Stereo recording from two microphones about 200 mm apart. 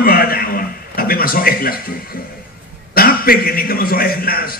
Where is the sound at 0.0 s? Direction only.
50° left (ahead or behind).